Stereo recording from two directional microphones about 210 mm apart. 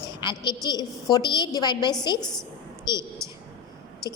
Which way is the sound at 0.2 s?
20° left (ahead or behind).